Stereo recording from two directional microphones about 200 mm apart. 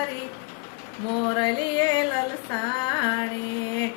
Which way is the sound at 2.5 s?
20° left (ahead or behind).